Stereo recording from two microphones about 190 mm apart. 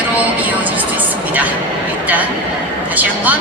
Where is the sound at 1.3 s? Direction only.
10° right (ahead or behind).